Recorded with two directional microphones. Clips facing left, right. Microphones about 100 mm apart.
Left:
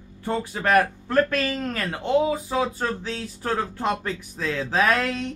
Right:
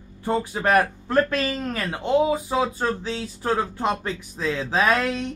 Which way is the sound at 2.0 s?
20° right (ahead or behind).